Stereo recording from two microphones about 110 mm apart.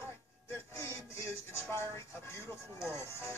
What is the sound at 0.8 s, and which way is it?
Speech, 25° left (ahead or behind).